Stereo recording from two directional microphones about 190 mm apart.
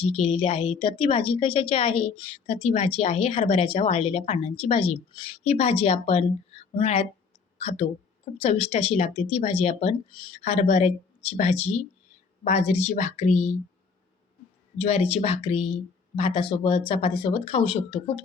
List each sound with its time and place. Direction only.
0.0 s a woman's voice: 30° left (ahead or behind)
14.8 s a woman's voice: 35° left (ahead or behind)